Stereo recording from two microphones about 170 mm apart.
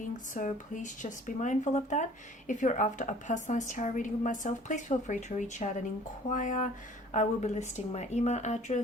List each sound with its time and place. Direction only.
0.3 s a woman's voice: 50° left (ahead or behind)